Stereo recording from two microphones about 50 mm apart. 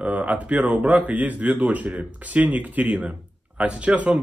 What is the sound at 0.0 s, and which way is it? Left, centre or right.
Speech, right.